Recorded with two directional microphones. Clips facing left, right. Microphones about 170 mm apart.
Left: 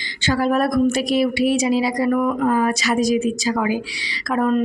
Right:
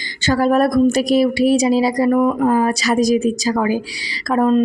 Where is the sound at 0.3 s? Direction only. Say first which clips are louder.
Right 4 dB; 40° right (ahead or behind).